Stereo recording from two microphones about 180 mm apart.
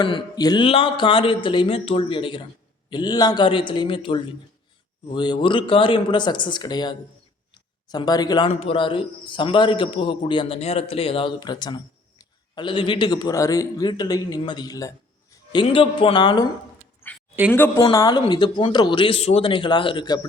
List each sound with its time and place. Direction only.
0.0 s a man's voice: 25° left (ahead or behind)
15.6 s a man's voice: 30° left (ahead or behind)
17.5 s a man's voice: 10° left (ahead or behind)